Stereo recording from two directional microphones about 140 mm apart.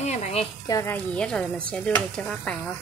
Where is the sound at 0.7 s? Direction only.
25° left (ahead or behind).